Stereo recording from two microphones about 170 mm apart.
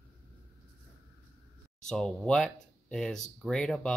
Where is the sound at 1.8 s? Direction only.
5° left (ahead or behind).